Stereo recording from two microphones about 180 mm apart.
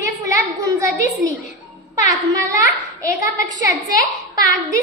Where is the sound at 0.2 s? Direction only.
15° right (ahead or behind).